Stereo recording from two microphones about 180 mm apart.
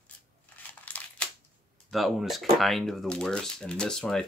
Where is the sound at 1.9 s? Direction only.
Centre (ahead or behind).